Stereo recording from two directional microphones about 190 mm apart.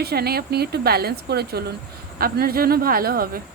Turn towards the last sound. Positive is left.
turn(degrees=-50)  # may be behind; listen again after turning